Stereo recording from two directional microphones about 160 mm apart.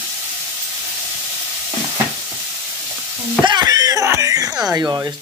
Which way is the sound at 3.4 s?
25° right (ahead or behind).